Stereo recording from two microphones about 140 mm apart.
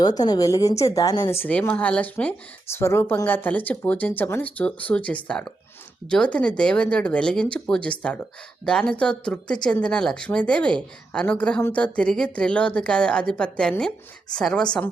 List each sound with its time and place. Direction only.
0.0 s a woman's voice: 30° left (ahead or behind)
1.3 s speech: 15° left (ahead or behind)